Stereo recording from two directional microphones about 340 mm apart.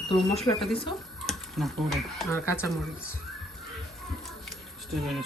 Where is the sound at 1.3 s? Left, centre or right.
Centre.